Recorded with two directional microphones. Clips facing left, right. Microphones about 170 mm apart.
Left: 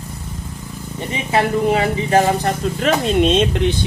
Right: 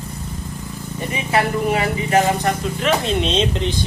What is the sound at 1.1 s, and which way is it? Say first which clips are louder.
Speech: left 2 dB; 25° left (ahead or behind).